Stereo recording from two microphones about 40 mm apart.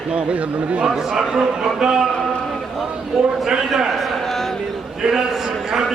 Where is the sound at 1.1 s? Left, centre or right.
Centre.